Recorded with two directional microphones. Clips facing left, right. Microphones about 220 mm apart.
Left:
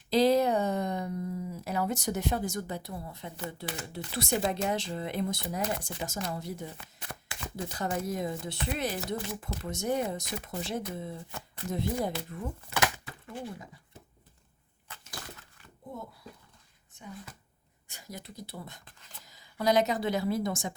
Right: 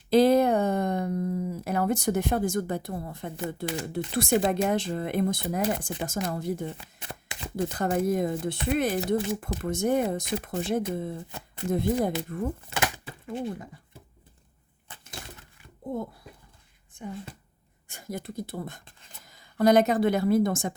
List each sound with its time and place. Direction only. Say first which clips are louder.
0.1 s speech: right 4 dB; 55° right (ahead or behind)
7.0 s shuffling cards: even; 20° right (ahead or behind)
7.5 s speech: right 7 dB; 55° right (ahead or behind)
12.7 s a sound: right 1 dB; 25° right (ahead or behind)
15.2 s a sound: right 2 dB; 25° right (ahead or behind)
16.9 s a woman's voice: right 8 dB; 50° right (ahead or behind)